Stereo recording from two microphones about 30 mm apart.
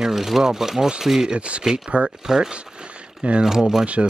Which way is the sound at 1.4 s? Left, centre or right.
Right.